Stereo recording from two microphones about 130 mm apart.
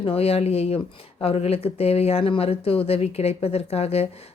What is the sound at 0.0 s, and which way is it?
Speech, 50° left (ahead or behind).